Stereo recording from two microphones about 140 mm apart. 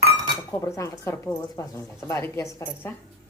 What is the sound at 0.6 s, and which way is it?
Speech, 20° left (ahead or behind).